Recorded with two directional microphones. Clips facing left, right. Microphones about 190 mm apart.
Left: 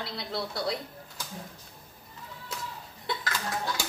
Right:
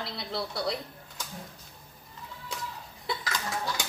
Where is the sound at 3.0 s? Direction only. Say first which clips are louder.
Even; centre (ahead or behind).